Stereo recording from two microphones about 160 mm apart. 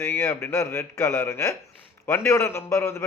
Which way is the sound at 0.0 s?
15° left (ahead or behind).